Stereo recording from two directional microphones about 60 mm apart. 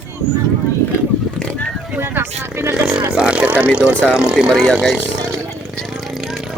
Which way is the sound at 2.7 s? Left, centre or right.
Centre.